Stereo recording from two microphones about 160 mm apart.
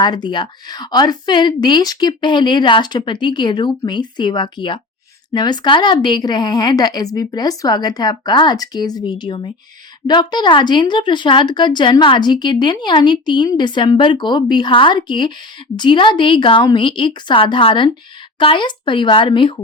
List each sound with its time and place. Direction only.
0.0 s a woman's voice: 25° left (ahead or behind)